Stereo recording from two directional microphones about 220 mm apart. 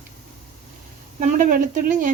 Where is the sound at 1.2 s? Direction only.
35° right (ahead or behind).